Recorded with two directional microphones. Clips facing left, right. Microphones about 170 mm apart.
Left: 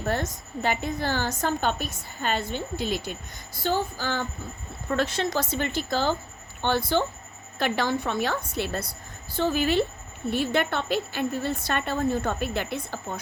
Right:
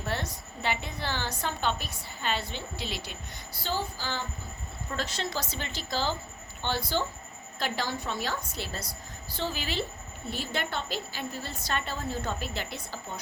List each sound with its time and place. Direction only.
0.0 s a woman's voice: 45° left (ahead or behind)